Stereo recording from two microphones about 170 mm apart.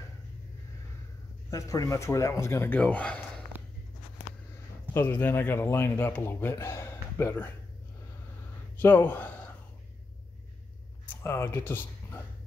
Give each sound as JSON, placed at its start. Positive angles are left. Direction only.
{"t": 1.5, "sound": "speech", "side_deg": 20}
{"t": 4.9, "sound": "speech", "side_deg": 10}
{"t": 8.7, "sound": "speech", "side_deg": 10}
{"t": 11.1, "sound": "speech", "side_deg": 15}